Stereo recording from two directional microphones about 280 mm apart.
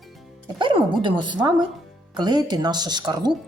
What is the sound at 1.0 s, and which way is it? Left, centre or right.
Speech, centre.